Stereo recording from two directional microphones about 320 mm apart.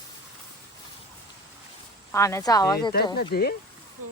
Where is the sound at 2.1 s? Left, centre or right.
Centre.